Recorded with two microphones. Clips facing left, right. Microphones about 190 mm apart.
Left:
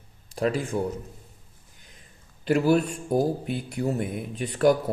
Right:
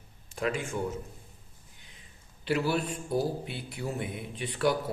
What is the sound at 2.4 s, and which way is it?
A man's voice, 45° left (ahead or behind).